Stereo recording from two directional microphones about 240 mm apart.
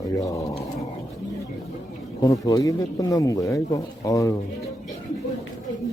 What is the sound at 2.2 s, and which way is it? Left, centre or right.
Speech, centre.